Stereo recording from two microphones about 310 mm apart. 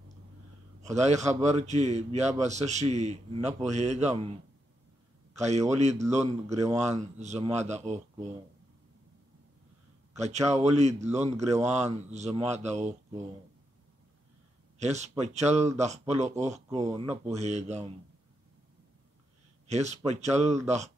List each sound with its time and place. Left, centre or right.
0.8 s speech: right
5.3 s speech: right
10.1 s speech: right
14.8 s speech: right
19.7 s speech: right